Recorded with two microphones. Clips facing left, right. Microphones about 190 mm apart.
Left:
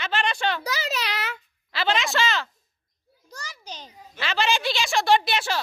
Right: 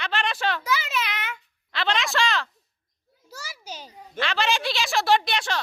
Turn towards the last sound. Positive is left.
turn(degrees=5)  # may be behind; listen again after turning